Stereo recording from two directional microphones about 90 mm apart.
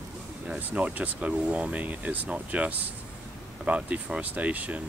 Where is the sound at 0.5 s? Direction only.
15° right (ahead or behind).